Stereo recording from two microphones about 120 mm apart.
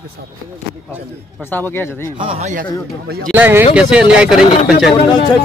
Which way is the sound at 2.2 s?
50° right (ahead or behind).